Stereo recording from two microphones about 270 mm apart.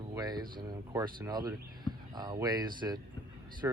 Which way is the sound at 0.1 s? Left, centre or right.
Centre.